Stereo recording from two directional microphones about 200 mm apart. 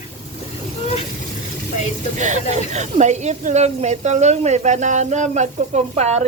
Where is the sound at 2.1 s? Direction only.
35° right (ahead or behind).